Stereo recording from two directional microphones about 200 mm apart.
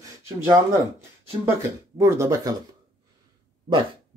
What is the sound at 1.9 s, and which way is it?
Speech, 15° right (ahead or behind).